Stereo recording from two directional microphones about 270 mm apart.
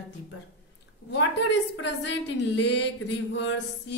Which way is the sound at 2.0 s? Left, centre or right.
Left.